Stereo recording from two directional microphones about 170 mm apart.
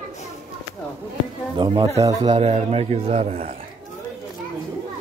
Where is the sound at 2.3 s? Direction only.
40° right (ahead or behind).